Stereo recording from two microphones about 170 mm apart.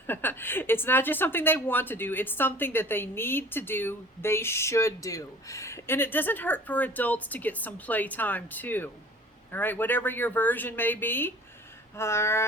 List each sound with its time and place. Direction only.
0.1 s a woman's voice: 10° left (ahead or behind)